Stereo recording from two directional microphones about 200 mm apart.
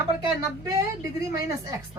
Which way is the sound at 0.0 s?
15° right (ahead or behind).